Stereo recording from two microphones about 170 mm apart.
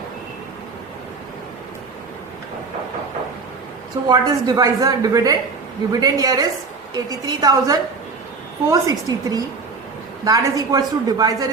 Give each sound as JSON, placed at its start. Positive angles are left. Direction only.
{"t": 4.1, "sound": "a woman's voice", "side_deg": -25}